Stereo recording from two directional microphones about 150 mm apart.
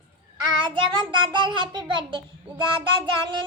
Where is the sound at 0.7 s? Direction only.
35° right (ahead or behind).